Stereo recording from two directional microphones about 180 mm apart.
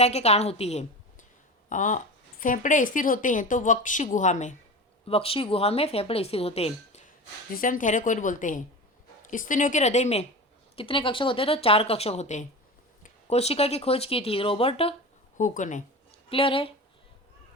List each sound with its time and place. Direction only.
0.0 s speech: 35° left (ahead or behind)
5.0 s speech: 30° left (ahead or behind)
7.5 s speech: 50° left (ahead or behind); by 14.9 s 30° left (ahead or behind)
15.4 s speech: 45° left (ahead or behind)
16.3 s speech: 30° left (ahead or behind)